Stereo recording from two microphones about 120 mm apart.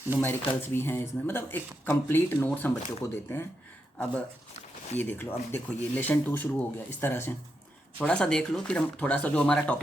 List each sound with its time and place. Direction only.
0.2 s speech: 20° left (ahead or behind)
3.9 s speech: 10° left (ahead or behind)